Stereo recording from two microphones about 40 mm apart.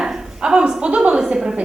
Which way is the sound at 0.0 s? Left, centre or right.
Centre.